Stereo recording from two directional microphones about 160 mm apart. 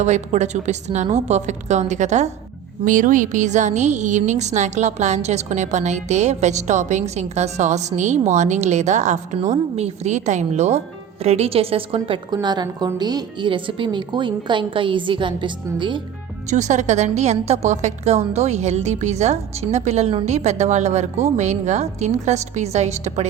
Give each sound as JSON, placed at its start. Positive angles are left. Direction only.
{"t": 0.0, "sound": "a woman's voice", "side_deg": -45}
{"t": 16.5, "sound": "a woman's voice", "side_deg": -45}